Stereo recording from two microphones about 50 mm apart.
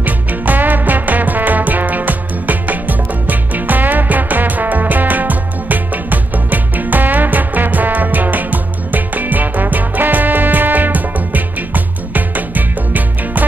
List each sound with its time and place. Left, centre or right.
0.0 s music: right